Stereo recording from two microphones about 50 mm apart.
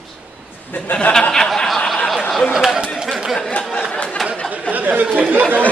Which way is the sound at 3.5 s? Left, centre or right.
Left.